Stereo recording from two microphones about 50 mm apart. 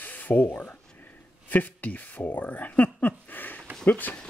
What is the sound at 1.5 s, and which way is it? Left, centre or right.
Speech, left.